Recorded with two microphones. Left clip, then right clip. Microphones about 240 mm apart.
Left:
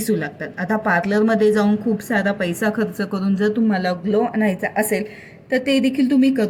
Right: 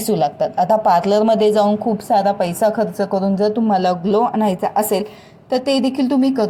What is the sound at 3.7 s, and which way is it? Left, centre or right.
Speech, right.